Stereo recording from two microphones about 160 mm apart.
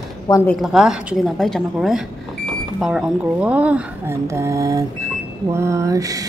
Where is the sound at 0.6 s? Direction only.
5° right (ahead or behind).